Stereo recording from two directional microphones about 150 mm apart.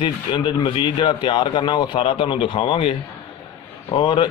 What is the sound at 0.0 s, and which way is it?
A man's voice, 30° left (ahead or behind).